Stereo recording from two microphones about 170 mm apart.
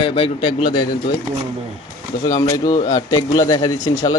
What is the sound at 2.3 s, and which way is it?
A man's voice, 20° left (ahead or behind).